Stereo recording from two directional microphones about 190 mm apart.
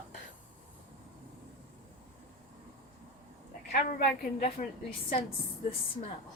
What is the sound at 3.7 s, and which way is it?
Speech, 45° left (ahead or behind).